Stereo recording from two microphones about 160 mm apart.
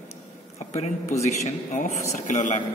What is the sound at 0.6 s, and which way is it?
Speech, 45° left (ahead or behind).